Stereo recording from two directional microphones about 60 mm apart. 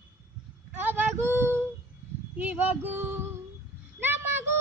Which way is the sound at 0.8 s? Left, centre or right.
Right.